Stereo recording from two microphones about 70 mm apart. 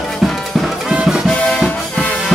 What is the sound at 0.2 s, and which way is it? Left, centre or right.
Music, centre.